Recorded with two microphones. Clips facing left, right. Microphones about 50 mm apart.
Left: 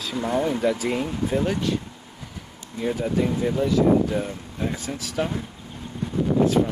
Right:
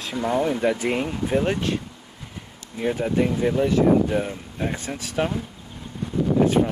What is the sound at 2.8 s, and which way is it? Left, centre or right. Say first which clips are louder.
Speech: right 2 dB; right.